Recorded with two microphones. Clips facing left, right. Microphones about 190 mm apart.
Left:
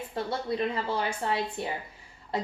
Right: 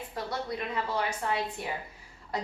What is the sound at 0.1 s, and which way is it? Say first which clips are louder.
A woman's voice: left 4 dB; 30° left (ahead or behind).